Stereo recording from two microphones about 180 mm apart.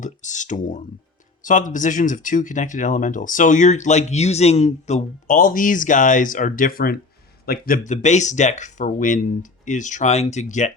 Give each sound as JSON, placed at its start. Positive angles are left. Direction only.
{"t": 0.0, "sound": "speech", "side_deg": 45}
{"t": 7.7, "sound": "speech", "side_deg": 40}